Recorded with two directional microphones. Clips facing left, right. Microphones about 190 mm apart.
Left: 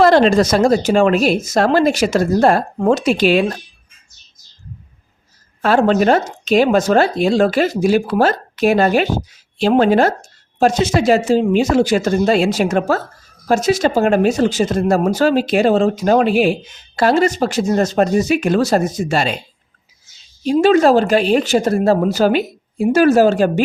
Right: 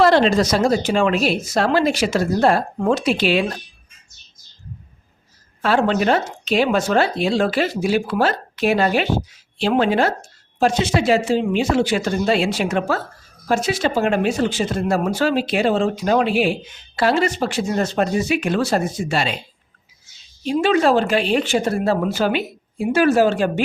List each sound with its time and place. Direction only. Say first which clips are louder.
0.0 s speech: left 3 dB; 45° left (ahead or behind)
5.6 s speech: left 4 dB; 45° left (ahead or behind)
20.4 s speech: left 5 dB; 40° left (ahead or behind)